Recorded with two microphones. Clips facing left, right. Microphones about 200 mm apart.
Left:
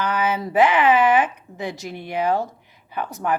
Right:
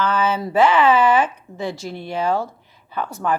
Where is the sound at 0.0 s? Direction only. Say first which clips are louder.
Right 2 dB; 15° left (ahead or behind).